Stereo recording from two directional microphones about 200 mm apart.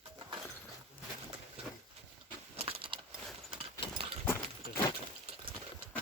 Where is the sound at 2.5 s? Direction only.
30° right (ahead or behind).